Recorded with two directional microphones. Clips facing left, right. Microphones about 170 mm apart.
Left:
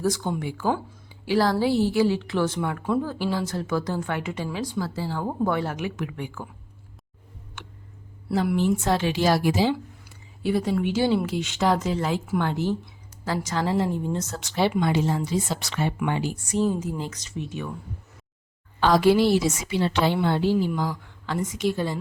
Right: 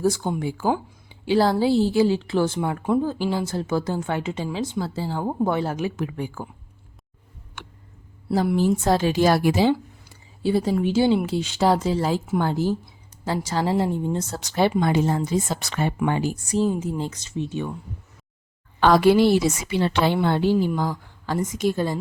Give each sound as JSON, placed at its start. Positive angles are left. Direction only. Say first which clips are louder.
{"t": 0.0, "sound": "a woman's voice", "louder": "right 3 dB", "side_deg": -25}
{"t": 8.3, "sound": "a woman's voice", "louder": "right 2 dB", "side_deg": -30}
{"t": 10.0, "sound": "a woman's voice", "louder": "right 4 dB", "side_deg": -30}
{"t": 14.8, "sound": "a woman's voice", "louder": "right 2 dB", "side_deg": -50}
{"t": 17.0, "sound": "a woman's voice", "louder": "right 4 dB", "side_deg": -25}
{"t": 18.8, "sound": "a woman's voice", "louder": "right 3 dB", "side_deg": -60}